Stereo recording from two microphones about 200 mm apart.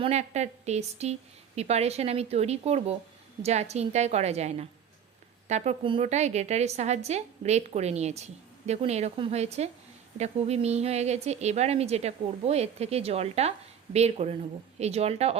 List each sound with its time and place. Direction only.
0.0 s a woman's voice: 35° right (ahead or behind)